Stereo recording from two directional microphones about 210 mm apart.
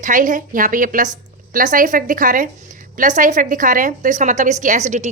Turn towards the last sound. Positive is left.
turn(degrees=-35)  # may be behind; listen again after turning